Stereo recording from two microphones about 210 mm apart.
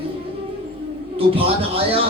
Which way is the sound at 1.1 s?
25° right (ahead or behind).